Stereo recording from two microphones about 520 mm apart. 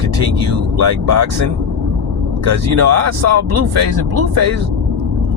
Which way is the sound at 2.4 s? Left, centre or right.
Right.